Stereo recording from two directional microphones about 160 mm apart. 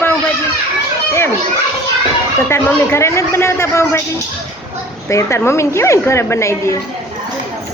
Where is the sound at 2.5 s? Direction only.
15° left (ahead or behind).